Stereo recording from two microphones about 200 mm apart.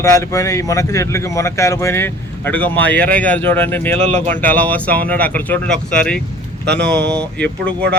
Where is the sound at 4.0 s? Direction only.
35° right (ahead or behind).